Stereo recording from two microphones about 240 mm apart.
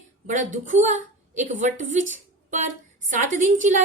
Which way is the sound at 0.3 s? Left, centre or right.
Right.